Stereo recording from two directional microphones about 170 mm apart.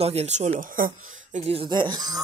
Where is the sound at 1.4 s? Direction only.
35° right (ahead or behind).